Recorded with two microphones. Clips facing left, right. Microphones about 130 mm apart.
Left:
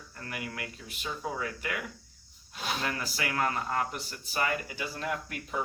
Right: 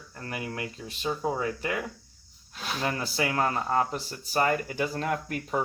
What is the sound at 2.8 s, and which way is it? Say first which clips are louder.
Speech: right 5 dB; 30° right (ahead or behind).